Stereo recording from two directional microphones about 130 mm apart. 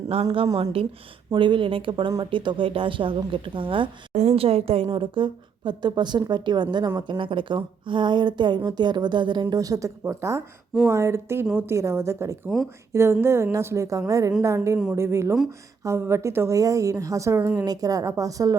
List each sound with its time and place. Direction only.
0.1 s a woman's voice: 45° right (ahead or behind)
4.1 s a woman's voice: 60° right (ahead or behind); by 18.5 s 25° right (ahead or behind)